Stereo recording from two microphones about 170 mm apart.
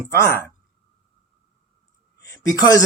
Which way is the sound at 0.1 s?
15° left (ahead or behind).